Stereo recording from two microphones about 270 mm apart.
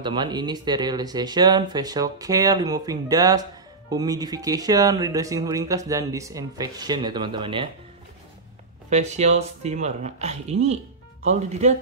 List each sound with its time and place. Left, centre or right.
0.0 s speech: centre
8.9 s speech: right